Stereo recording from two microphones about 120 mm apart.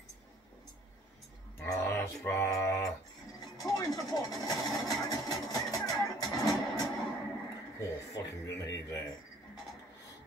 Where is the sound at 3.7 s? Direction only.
30° left (ahead or behind).